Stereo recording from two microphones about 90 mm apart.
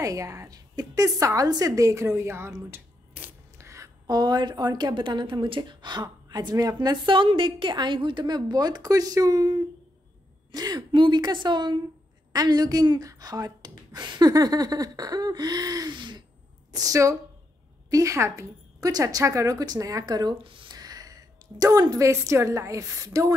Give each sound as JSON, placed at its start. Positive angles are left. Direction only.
{"t": 0.0, "sound": "a woman's voice", "side_deg": -35}
{"t": 6.2, "sound": "speech", "side_deg": -45}
{"t": 7.1, "sound": "a woman's voice", "side_deg": -75}
{"t": 10.9, "sound": "a woman's voice", "side_deg": -60}
{"t": 12.3, "sound": "speech", "side_deg": -45}
{"t": 16.7, "sound": "a woman's voice", "side_deg": -40}